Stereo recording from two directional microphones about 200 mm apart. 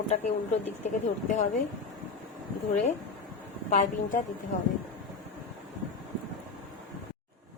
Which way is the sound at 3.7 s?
40° left (ahead or behind).